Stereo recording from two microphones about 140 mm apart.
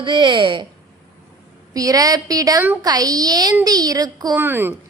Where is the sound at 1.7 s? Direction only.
25° right (ahead or behind).